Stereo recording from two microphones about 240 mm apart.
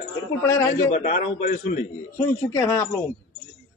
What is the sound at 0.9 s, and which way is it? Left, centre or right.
Speech, left.